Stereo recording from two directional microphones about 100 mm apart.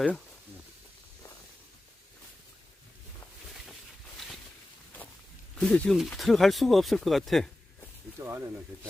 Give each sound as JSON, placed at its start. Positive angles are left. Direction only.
{"t": 5.5, "sound": "speech", "side_deg": 10}
{"t": 8.2, "sound": "speech", "side_deg": -25}